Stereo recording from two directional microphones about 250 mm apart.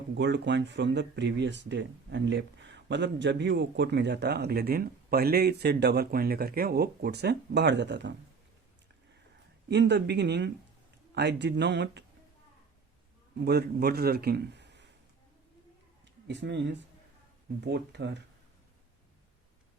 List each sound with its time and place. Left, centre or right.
0.1 s speech: right
9.6 s speech: right
13.4 s a man's voice: right
16.2 s speech: right